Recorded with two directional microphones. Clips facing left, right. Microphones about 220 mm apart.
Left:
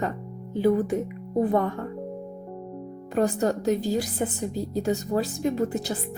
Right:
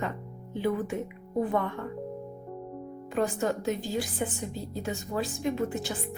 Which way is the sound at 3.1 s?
40° left (ahead or behind).